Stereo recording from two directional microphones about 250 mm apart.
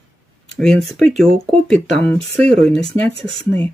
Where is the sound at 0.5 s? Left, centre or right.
Centre.